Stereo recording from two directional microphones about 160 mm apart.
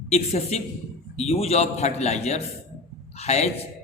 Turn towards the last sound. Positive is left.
turn(degrees=40)  # may be behind; listen again after turning